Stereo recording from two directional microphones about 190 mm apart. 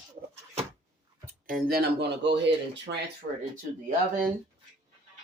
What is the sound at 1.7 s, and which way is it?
Speech, 60° right (ahead or behind).